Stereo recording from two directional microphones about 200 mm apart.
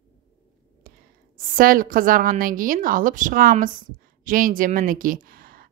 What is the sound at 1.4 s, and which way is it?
A woman's voice, 45° right (ahead or behind).